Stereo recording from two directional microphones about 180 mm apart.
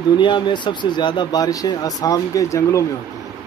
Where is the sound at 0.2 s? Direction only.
25° left (ahead or behind).